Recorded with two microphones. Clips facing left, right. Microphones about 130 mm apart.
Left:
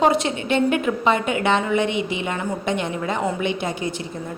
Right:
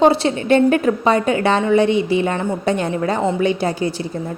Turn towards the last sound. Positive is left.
turn(degrees=-35)  # may be behind; listen again after turning